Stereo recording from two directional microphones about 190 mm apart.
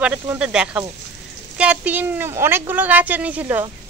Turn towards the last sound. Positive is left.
turn(degrees=-10)  # may be behind; listen again after turning